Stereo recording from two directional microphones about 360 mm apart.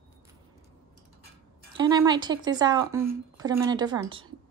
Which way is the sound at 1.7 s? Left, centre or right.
Centre.